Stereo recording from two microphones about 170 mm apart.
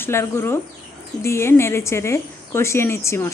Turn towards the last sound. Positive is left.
turn(degrees=15)  # may be behind; listen again after turning